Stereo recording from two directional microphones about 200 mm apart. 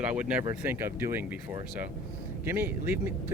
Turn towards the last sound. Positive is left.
turn(degrees=-10)  # may be behind; listen again after turning